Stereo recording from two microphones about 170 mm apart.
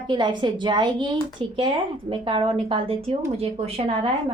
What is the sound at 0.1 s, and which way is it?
A woman's voice, 25° right (ahead or behind).